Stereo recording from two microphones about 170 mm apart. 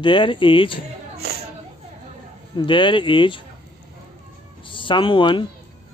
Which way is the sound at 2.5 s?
30° left (ahead or behind).